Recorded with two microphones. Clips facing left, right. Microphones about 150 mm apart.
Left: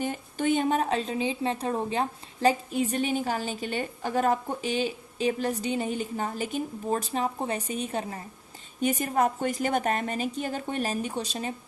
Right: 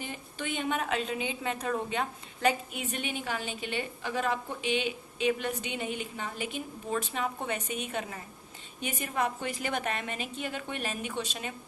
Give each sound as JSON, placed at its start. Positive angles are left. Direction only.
{"t": 0.0, "sound": "a woman's voice", "side_deg": 45}